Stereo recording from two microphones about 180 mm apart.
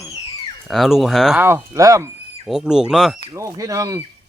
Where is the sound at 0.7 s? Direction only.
Centre (ahead or behind).